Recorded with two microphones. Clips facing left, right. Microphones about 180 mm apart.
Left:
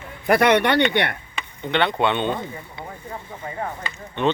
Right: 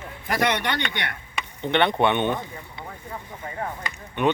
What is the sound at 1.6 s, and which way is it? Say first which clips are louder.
Speech: even; 20° right (ahead or behind).